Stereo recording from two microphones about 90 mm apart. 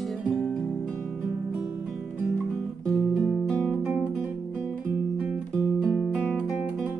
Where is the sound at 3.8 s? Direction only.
20° right (ahead or behind).